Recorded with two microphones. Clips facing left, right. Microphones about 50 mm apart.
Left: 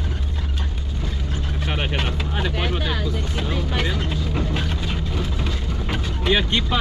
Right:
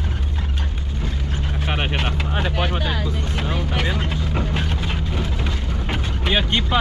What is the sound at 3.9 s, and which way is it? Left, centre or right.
Speech, right.